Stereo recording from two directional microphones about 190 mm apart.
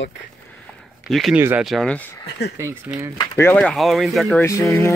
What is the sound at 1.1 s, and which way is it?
Speech, centre (ahead or behind).